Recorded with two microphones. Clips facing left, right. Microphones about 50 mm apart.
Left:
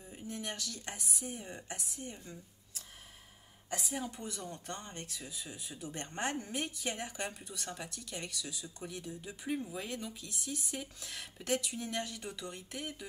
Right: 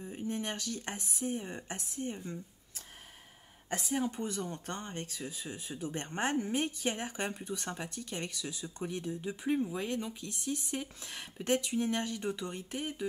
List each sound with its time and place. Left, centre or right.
0.0 s a sound: right
0.4 s speech: right
3.7 s speech: right